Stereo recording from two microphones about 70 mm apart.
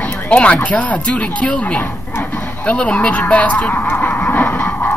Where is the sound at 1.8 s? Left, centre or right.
Left.